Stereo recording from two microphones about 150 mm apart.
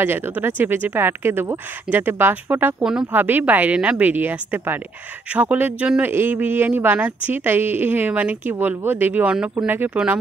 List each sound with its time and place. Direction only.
0.0 s speech: 15° right (ahead or behind)